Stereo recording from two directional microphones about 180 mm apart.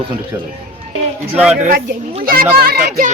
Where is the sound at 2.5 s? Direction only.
55° right (ahead or behind).